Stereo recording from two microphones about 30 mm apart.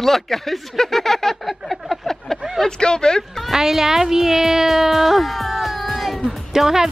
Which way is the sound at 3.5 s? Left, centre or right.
Centre.